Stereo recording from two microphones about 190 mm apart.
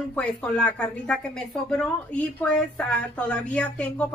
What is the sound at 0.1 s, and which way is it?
A woman's voice, 5° left (ahead or behind).